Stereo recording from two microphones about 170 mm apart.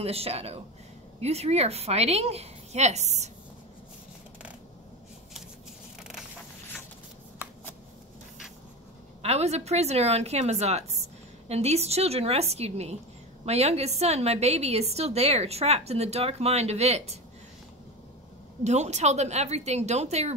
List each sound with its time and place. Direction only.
0.0 s a woman's voice: 35° right (ahead or behind)
9.2 s a woman's voice: 40° right (ahead or behind)
18.6 s a woman's voice: 40° right (ahead or behind)